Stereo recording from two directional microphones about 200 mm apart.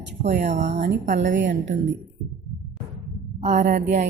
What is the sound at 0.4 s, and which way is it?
Speech, 35° right (ahead or behind).